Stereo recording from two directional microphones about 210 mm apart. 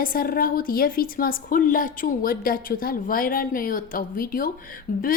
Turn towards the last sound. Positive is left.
turn(degrees=40)  # may be behind; listen again after turning